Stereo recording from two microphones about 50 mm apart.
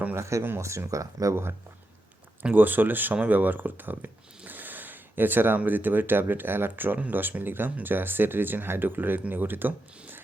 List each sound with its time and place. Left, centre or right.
0.2 s speech: right
2.6 s speech: right